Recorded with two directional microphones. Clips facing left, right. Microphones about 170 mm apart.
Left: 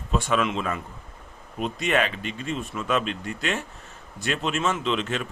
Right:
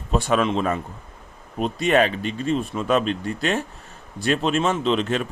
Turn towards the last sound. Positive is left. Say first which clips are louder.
# right 5 dB
turn(degrees=-35)  # may be behind; listen again after turning